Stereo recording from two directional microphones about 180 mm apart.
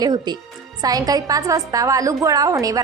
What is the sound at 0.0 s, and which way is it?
A woman's voice, 25° right (ahead or behind).